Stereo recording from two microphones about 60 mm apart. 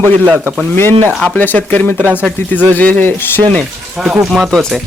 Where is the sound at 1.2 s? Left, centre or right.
Left.